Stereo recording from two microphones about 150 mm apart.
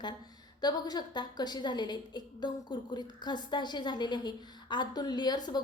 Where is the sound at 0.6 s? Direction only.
25° left (ahead or behind).